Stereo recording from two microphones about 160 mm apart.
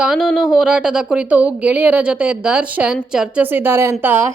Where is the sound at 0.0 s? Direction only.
Centre (ahead or behind).